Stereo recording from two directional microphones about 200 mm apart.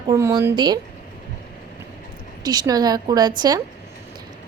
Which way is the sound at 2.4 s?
20° right (ahead or behind).